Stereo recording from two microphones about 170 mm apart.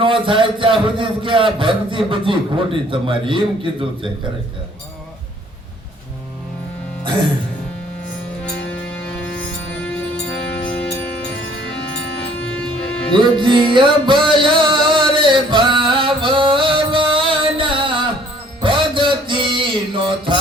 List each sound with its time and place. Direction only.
0.0 s a man's voice: 30° right (ahead or behind)
10.6 s music: 5° left (ahead or behind)
12.5 s music: 5° left (ahead or behind)
13.1 s music: 30° right (ahead or behind)